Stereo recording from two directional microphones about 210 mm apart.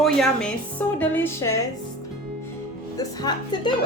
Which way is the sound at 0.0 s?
5° left (ahead or behind).